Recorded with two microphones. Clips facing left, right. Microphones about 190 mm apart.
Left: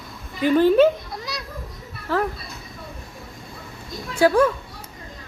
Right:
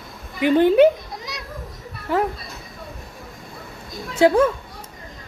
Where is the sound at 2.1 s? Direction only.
15° right (ahead or behind).